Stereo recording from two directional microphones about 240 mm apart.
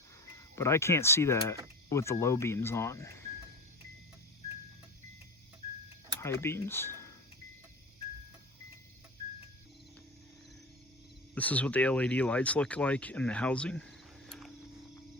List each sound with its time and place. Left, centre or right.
0.5 s speech: centre
6.1 s speech: centre
11.3 s speech: centre